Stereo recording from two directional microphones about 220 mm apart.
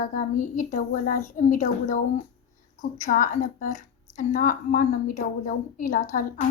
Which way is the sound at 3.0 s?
35° left (ahead or behind).